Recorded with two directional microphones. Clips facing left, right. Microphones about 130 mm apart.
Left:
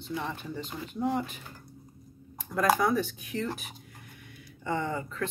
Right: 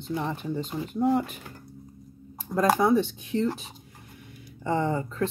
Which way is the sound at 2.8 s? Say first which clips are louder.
Right 5 dB; 25° right (ahead or behind).